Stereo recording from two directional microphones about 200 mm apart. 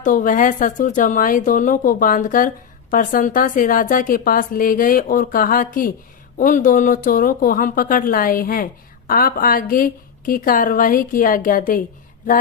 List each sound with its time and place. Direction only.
0.0 s a woman's voice: 40° left (ahead or behind)